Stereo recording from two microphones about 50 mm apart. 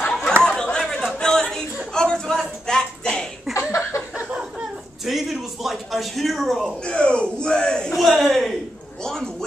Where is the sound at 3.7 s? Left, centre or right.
Left.